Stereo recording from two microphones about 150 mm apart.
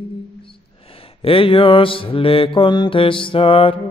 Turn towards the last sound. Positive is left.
turn(degrees=35)  # may be behind; listen again after turning